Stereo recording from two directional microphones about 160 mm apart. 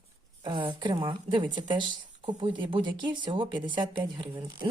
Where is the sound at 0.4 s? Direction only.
30° right (ahead or behind).